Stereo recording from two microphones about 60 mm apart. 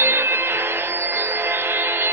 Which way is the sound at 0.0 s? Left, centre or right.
Right.